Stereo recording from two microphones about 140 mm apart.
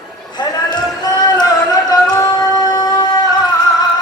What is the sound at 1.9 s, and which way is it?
Singing, 30° left (ahead or behind).